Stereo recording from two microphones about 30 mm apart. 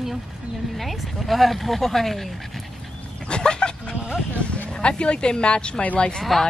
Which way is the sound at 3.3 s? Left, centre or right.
Left.